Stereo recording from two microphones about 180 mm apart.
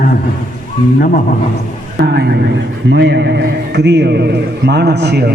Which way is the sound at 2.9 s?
75° right (ahead or behind).